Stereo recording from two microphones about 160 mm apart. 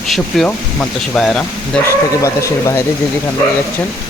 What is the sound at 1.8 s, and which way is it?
Speech, 20° left (ahead or behind).